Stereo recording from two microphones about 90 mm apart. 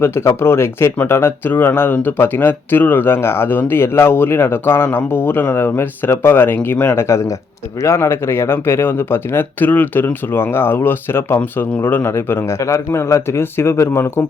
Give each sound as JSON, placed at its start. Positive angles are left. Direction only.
{"t": 0.0, "sound": "speech", "side_deg": 30}